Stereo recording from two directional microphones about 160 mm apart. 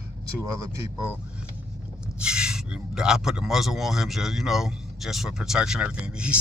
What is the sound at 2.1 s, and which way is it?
Speech, 5° right (ahead or behind).